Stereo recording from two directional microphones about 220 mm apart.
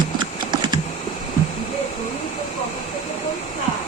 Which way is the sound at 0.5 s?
20° right (ahead or behind).